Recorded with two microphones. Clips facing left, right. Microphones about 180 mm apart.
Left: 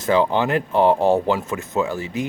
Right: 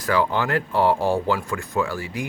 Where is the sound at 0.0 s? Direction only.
20° left (ahead or behind).